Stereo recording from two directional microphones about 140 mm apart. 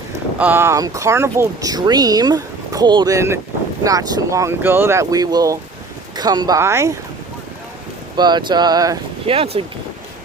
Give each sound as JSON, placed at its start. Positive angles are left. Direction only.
{"t": 0.3, "sound": "speech", "side_deg": -15}
{"t": 8.1, "sound": "speech", "side_deg": -30}
{"t": 9.2, "sound": "speech", "side_deg": -45}